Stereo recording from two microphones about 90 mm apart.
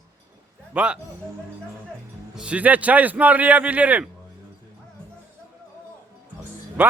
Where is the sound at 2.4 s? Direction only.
15° right (ahead or behind).